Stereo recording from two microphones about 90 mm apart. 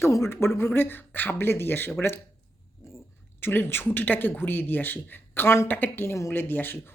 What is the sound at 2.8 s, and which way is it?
Cat, 30° left (ahead or behind).